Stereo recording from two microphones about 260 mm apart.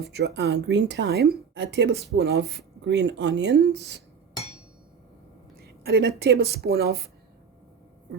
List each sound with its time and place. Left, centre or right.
0.0 s a woman's voice: right
5.5 s speech: right